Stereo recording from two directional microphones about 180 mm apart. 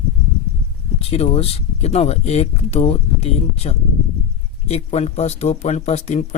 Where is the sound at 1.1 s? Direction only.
35° left (ahead or behind).